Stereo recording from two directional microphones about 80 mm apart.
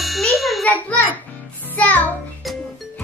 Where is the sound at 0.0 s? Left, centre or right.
Centre.